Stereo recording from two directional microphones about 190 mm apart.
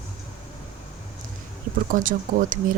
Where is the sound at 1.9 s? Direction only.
45° right (ahead or behind).